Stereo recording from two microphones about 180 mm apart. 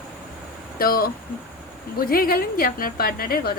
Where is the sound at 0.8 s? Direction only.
55° left (ahead or behind).